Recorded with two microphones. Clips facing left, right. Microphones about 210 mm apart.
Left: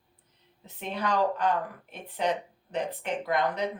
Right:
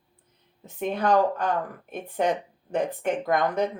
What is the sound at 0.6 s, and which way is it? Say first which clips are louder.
Speech: right 6 dB; 50° right (ahead or behind).